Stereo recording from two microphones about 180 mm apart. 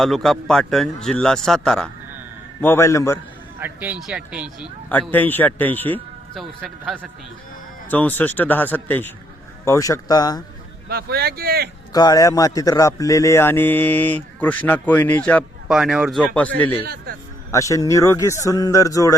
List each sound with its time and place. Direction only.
0.0 s a man's voice: centre (ahead or behind)
2.6 s a man's voice: 15° left (ahead or behind)
3.6 s speech: 10° right (ahead or behind)
4.9 s a man's voice: 10° left (ahead or behind)
7.9 s a man's voice: 10° left (ahead or behind)
10.8 s speech: 60° right (ahead or behind)
11.9 s a man's voice: 20° left (ahead or behind)
15.7 s a man's voice: 5° right (ahead or behind)
16.8 s speech: 55° right (ahead or behind)
17.5 s a man's voice: 15° left (ahead or behind)